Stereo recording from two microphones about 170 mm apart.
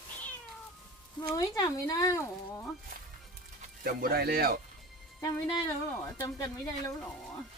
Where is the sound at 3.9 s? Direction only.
65° right (ahead or behind).